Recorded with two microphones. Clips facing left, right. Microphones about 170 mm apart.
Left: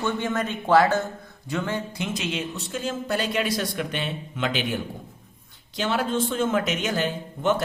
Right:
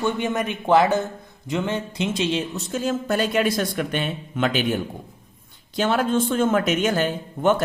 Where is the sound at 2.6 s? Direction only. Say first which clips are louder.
Right 5 dB; 45° right (ahead or behind).